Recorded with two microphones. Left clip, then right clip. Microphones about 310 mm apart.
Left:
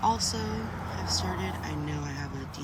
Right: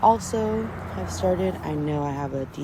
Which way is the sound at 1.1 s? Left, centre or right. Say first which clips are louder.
Right 10 dB; centre.